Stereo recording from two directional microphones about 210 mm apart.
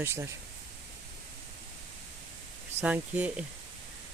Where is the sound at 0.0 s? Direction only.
10° right (ahead or behind).